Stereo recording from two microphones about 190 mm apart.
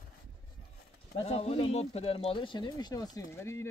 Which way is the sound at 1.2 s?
30° left (ahead or behind).